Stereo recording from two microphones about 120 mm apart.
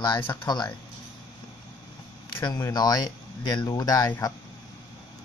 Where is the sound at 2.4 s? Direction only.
35° left (ahead or behind).